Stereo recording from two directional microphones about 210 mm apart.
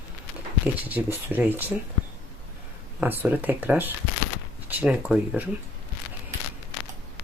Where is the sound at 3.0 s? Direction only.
5° right (ahead or behind).